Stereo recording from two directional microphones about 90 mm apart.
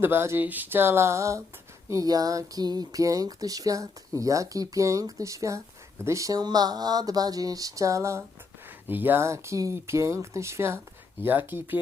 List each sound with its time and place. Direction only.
0.0 s speech: 25° right (ahead or behind)
8.9 s speech: 20° right (ahead or behind)